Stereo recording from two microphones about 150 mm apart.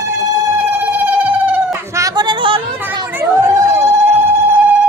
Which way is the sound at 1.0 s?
10° right (ahead or behind).